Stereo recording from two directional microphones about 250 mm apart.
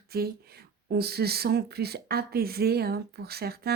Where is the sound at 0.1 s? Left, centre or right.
Right.